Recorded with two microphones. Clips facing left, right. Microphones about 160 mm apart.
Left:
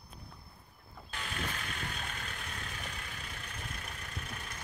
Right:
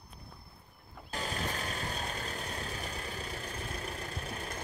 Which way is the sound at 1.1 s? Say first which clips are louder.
Right 4 dB; 35° right (ahead or behind).